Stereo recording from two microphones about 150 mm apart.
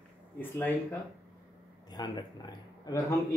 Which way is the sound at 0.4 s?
10° left (ahead or behind).